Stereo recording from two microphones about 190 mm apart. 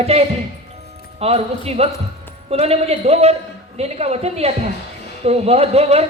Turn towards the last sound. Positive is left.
turn(degrees=-35)  # may be behind; listen again after turning